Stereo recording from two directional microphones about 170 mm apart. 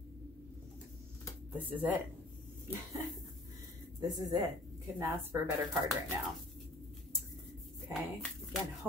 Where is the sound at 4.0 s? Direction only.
20° right (ahead or behind).